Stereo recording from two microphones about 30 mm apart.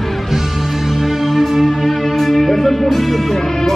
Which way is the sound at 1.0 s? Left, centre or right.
Centre.